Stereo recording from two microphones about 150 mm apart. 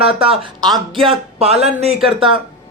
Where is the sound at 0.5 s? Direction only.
25° right (ahead or behind).